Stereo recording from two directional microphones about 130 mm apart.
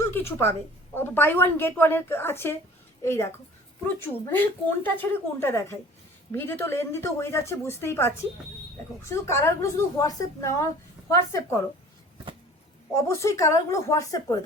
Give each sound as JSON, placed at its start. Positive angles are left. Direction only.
{"t": 0.0, "sound": "a sound", "side_deg": 20}
{"t": 0.9, "sound": "a woman's voice", "side_deg": 15}
{"t": 12.9, "sound": "speech", "side_deg": 25}